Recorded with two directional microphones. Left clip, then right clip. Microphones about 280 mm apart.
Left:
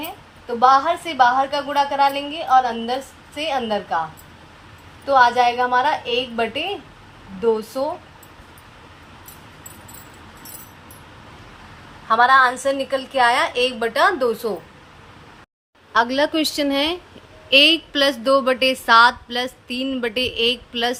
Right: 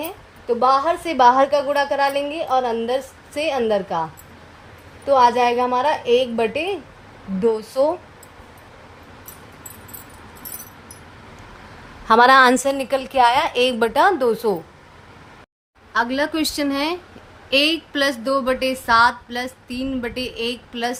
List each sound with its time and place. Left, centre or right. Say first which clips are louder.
0.4 s a woman's voice: left 2 dB; right
5.0 s a woman's voice: even; right
12.0 s a woman's voice: right 2 dB; right
15.9 s speech: left 3 dB; centre